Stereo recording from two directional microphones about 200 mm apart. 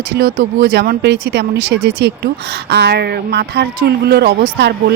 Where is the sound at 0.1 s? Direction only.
55° right (ahead or behind).